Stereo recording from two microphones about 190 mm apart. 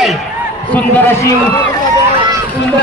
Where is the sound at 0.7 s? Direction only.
10° left (ahead or behind).